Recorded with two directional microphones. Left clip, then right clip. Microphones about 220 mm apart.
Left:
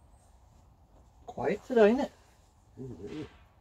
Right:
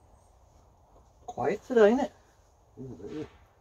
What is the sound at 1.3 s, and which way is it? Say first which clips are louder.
Speech: right 2 dB; 20° left (ahead or behind).